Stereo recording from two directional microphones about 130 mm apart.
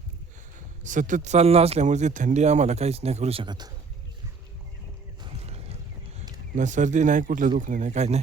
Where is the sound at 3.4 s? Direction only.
35° right (ahead or behind).